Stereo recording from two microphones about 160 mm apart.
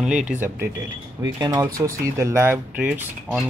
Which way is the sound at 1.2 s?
25° right (ahead or behind).